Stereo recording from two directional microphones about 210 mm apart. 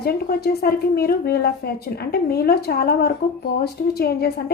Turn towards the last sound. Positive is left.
turn(degrees=50)  # may be behind; listen again after turning